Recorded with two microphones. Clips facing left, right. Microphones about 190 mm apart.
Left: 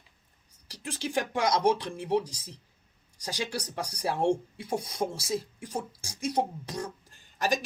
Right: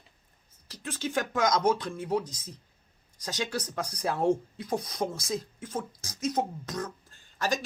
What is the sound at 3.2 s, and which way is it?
Speech, 10° left (ahead or behind).